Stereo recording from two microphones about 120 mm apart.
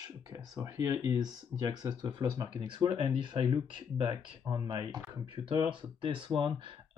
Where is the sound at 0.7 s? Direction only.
25° right (ahead or behind).